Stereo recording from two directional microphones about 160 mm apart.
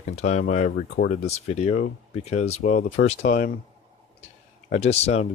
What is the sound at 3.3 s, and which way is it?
Speech, 65° left (ahead or behind).